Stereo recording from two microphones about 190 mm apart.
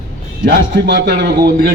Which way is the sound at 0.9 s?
70° right (ahead or behind).